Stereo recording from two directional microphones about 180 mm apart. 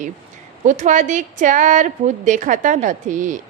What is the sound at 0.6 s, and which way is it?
A woman's voice, 40° right (ahead or behind).